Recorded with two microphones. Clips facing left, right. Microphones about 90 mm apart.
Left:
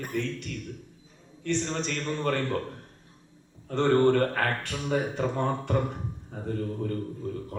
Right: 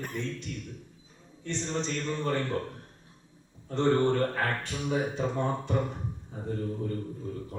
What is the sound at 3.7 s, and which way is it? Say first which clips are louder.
Speech: left 3 dB; 60° left (ahead or behind).